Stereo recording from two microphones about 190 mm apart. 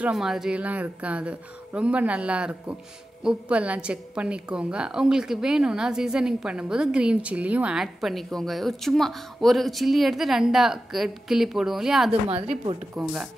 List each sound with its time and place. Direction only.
0.0 s a woman's voice: 5° right (ahead or behind)
12.1 s a woman's voice: 30° right (ahead or behind)
12.9 s a woman's voice: 5° right (ahead or behind)